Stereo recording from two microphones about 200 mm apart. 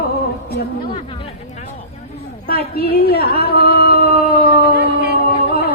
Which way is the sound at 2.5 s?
50° left (ahead or behind).